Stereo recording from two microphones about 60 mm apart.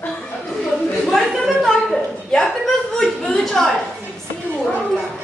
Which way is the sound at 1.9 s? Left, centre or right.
Centre.